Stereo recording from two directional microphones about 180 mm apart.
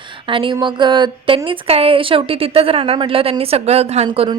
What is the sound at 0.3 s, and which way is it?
Speech, 30° right (ahead or behind).